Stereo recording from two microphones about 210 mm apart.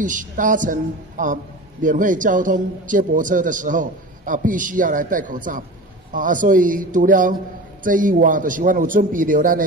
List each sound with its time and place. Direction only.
0.0 s a man's voice: 40° right (ahead or behind)